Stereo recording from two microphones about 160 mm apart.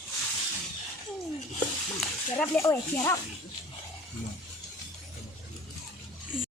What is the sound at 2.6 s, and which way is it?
Speech, 20° left (ahead or behind).